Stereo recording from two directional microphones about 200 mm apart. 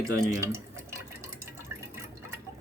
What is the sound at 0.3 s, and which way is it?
Speech, 15° right (ahead or behind).